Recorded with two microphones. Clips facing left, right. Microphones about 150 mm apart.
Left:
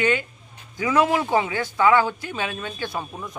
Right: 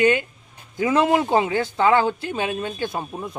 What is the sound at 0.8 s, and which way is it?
A man's voice, 25° right (ahead or behind).